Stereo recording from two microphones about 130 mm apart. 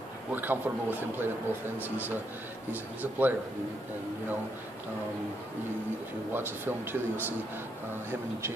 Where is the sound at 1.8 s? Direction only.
15° right (ahead or behind).